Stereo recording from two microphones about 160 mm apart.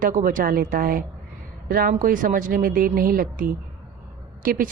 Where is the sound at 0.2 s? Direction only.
60° right (ahead or behind).